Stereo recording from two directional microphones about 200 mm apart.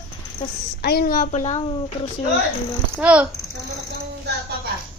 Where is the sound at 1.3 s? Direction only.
35° left (ahead or behind).